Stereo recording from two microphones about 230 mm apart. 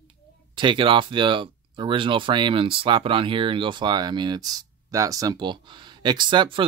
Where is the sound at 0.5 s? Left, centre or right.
Right.